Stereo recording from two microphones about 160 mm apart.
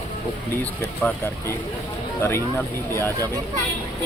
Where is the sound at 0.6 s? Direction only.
10° left (ahead or behind).